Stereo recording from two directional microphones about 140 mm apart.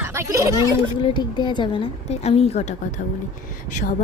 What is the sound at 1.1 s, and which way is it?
Speech, 30° left (ahead or behind).